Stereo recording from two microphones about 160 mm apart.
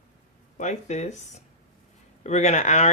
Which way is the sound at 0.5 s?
45° left (ahead or behind).